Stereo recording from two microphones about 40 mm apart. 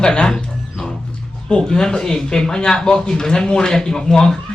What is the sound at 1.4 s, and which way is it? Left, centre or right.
A woman's voice, centre.